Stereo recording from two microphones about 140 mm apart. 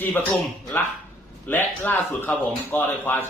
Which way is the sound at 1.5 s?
15° left (ahead or behind).